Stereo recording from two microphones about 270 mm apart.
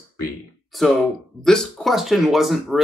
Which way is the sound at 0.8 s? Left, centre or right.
Centre.